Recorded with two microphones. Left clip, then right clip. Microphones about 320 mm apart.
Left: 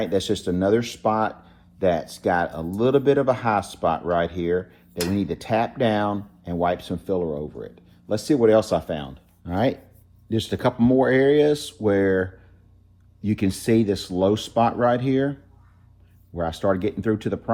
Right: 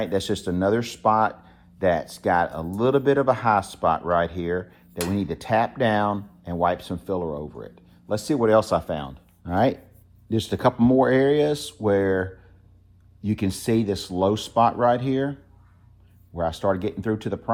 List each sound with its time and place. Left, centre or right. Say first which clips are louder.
0.0 s speech: left 2 dB; centre